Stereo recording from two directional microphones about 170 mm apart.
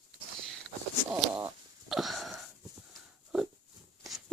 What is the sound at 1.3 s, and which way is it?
Fart, 5° right (ahead or behind).